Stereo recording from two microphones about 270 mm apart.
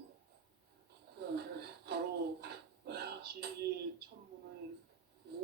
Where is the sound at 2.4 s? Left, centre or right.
Right.